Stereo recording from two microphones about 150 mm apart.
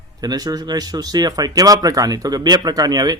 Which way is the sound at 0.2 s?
25° right (ahead or behind).